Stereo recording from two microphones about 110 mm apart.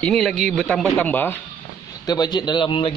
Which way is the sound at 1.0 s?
15° left (ahead or behind).